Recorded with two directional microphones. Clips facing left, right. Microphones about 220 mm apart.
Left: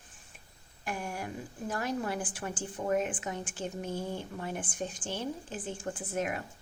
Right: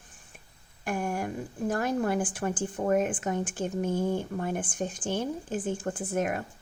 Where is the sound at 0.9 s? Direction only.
50° right (ahead or behind).